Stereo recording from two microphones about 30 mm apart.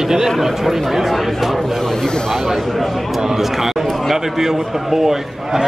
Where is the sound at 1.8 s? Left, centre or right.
Centre.